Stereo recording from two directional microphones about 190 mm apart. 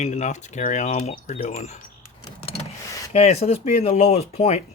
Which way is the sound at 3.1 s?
35° left (ahead or behind).